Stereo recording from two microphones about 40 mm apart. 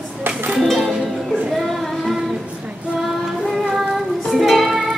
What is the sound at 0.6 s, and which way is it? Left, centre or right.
Music, centre.